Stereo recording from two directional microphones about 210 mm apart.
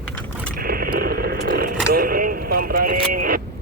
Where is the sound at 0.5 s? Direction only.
45° right (ahead or behind).